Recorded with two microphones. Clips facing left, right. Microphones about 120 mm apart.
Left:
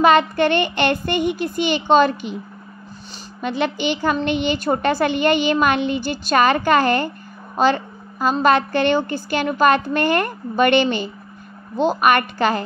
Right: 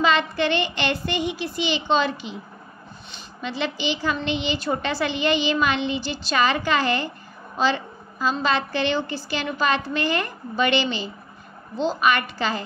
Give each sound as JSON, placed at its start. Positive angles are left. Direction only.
{"t": 0.0, "sound": "a woman's voice", "side_deg": 50}
{"t": 3.3, "sound": "a woman's voice", "side_deg": 55}